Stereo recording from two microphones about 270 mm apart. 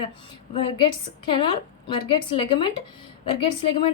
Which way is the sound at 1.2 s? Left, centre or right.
Centre.